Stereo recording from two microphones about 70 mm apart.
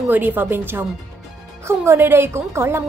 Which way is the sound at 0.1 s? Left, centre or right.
Right.